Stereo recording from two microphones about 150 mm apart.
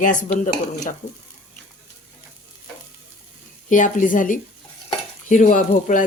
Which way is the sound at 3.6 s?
60° left (ahead or behind).